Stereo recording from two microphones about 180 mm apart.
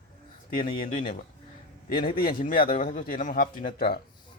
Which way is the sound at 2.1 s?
55° left (ahead or behind).